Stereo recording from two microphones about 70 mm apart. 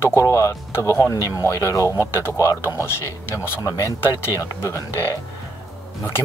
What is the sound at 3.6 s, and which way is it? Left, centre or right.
Speech, left.